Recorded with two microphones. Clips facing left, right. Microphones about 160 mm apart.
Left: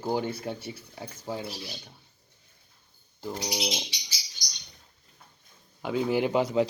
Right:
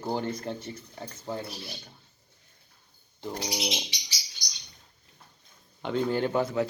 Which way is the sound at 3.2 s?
5° left (ahead or behind).